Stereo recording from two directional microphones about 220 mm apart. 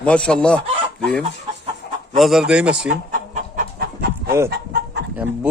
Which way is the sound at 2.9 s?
40° right (ahead or behind).